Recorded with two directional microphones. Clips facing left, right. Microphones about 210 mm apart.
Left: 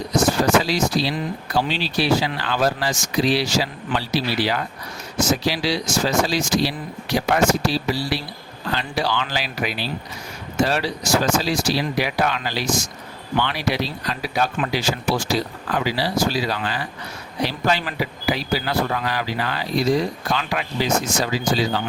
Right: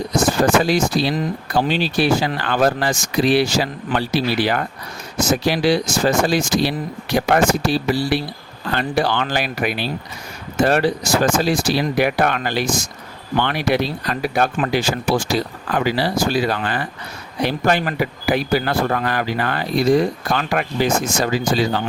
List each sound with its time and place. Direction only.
0.4 s speech: 55° right (ahead or behind)